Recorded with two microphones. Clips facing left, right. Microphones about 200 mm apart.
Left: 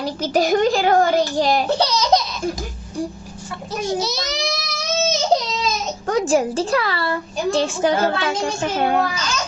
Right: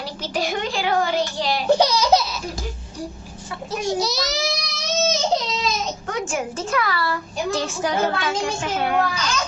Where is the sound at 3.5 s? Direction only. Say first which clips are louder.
Left 1 dB; centre (ahead or behind).